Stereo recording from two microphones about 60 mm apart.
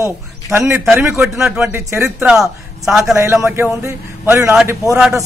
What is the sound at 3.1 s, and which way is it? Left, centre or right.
A man's voice, right.